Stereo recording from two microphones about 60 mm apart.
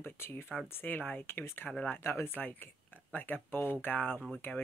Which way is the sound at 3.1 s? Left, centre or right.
Left.